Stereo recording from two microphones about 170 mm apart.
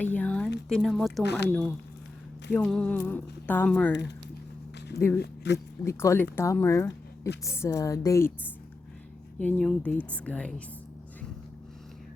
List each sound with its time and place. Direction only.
0.0 s a sound: 10° left (ahead or behind)
0.7 s speech: centre (ahead or behind)
1.2 s speech: 85° left
2.5 s speech: 5° left (ahead or behind)
4.9 s speech: 15° left (ahead or behind)
5.2 s speech: 90° left
5.8 s speech: 15° left (ahead or behind)
9.4 s speech: 5° left (ahead or behind)